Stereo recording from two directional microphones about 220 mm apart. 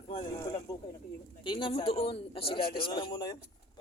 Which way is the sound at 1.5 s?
20° left (ahead or behind).